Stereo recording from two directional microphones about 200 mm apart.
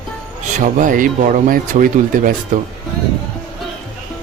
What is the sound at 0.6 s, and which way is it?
Speech, 40° right (ahead or behind).